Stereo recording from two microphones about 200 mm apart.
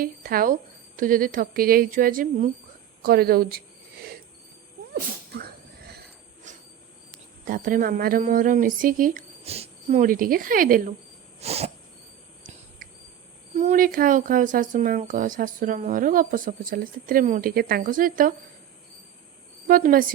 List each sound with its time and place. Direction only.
0.0 s speech: 45° right (ahead or behind)
4.9 s a sound: 50° right (ahead or behind)
7.4 s speech: 45° right (ahead or behind)
9.4 s speech: 30° right (ahead or behind)
11.3 s a sound: 30° right (ahead or behind)
13.6 s speech: 40° right (ahead or behind)
19.6 s a woman's voice: 45° right (ahead or behind)